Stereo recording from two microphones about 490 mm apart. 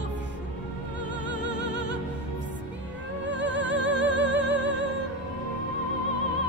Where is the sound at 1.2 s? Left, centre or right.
Right.